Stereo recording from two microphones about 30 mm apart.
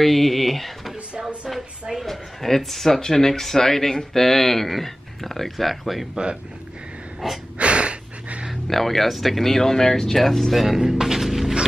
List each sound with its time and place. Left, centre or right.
0.0 s speech: centre
2.0 s speech: centre
7.5 s a sound: right
8.6 s speech: centre
10.5 s speech: centre
10.8 s music: centre